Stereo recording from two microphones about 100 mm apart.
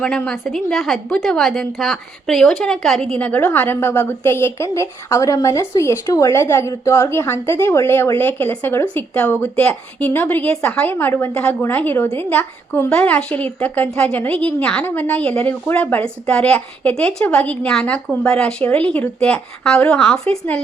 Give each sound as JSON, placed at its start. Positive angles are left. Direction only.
{"t": 0.0, "sound": "a woman's voice", "side_deg": 10}